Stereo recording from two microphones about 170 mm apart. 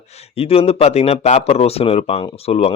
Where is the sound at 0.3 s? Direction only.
35° left (ahead or behind).